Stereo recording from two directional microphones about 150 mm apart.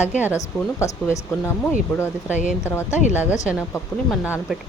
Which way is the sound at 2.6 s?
15° left (ahead or behind).